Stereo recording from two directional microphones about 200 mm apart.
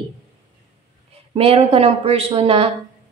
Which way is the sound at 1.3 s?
30° right (ahead or behind).